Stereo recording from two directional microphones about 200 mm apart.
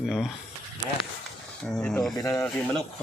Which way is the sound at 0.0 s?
5° right (ahead or behind).